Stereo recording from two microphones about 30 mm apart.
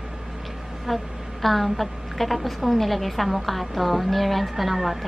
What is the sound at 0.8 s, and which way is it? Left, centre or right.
A woman's voice, centre.